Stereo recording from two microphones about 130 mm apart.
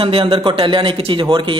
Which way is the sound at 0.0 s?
45° right (ahead or behind).